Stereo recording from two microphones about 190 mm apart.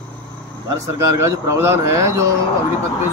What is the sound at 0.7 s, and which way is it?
Speech, 15° right (ahead or behind).